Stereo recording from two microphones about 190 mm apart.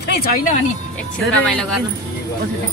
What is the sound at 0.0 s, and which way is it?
Speech, 60° left (ahead or behind).